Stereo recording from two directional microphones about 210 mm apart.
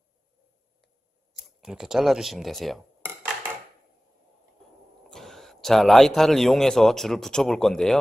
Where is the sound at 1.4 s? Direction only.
5° right (ahead or behind).